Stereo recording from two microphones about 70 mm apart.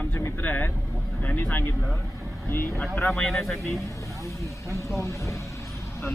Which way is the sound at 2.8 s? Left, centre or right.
Left.